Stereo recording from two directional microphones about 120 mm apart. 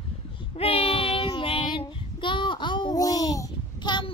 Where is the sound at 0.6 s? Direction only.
55° left (ahead or behind).